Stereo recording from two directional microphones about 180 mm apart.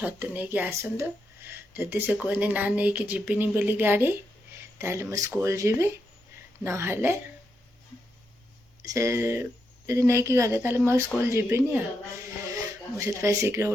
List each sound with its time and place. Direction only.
0.0 s speech: 10° right (ahead or behind)
8.8 s speech: 15° right (ahead or behind)
13.0 s speech: 15° right (ahead or behind)